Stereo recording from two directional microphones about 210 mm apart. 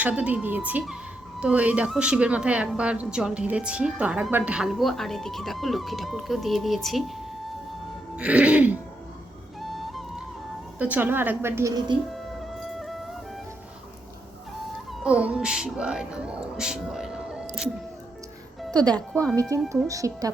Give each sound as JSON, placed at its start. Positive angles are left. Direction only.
{"t": 0.0, "sound": "a woman's voice", "side_deg": -5}
{"t": 8.1, "sound": "a woman's voice", "side_deg": -5}
{"t": 9.6, "sound": "flute", "side_deg": 0}
{"t": 10.8, "sound": "a woman's voice", "side_deg": -5}
{"t": 12.1, "sound": "music", "side_deg": 0}
{"t": 15.0, "sound": "speech", "side_deg": -5}
{"t": 19.9, "sound": "a woman's voice", "side_deg": -15}